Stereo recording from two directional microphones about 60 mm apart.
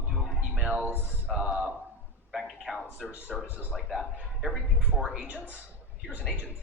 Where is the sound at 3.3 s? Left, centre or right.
Centre.